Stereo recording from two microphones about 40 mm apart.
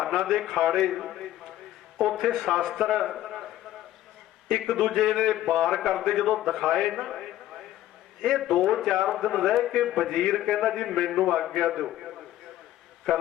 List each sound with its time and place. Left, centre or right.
0.0 s a man's voice: centre
3.2 s a sound: centre
4.4 s a man's voice: centre
6.1 s a man's voice: centre
8.2 s a man's voice: centre